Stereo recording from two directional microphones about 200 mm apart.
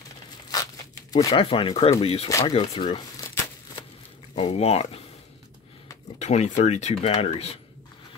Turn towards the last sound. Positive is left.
turn(degrees=30)  # may be behind; listen again after turning